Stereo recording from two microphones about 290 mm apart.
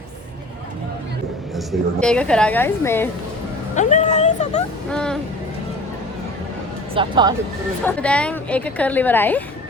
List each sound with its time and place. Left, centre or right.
1.5 s speech: centre
3.8 s speech: left
4.9 s speech: centre
6.9 s speech: centre
7.9 s speech: centre